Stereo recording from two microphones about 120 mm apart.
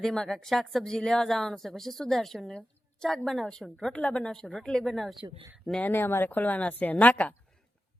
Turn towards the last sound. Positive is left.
turn(degrees=10)  # may be behind; listen again after turning